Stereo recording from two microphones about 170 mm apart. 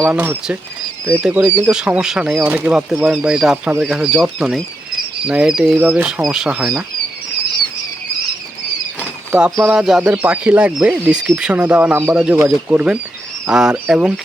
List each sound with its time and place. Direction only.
0.0 s speech: 10° right (ahead or behind)
9.7 s speech: 5° right (ahead or behind)